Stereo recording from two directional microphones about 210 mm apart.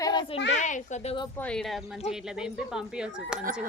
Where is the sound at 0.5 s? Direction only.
35° left (ahead or behind).